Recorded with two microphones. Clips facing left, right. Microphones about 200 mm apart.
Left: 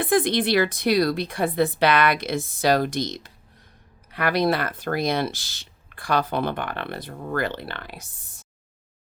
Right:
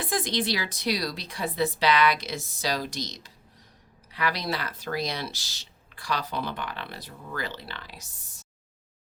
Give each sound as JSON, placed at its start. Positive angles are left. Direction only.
{"t": 0.0, "sound": "speech", "side_deg": 60}